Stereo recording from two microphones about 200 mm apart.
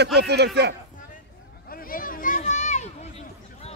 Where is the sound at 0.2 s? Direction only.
55° right (ahead or behind).